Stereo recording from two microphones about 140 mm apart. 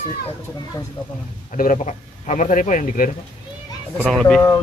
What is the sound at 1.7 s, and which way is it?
Speech, 60° left (ahead or behind).